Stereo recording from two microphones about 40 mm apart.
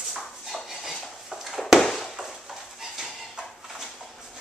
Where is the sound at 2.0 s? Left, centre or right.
Centre.